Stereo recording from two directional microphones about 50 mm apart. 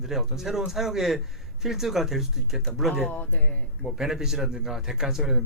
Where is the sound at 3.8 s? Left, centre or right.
Centre.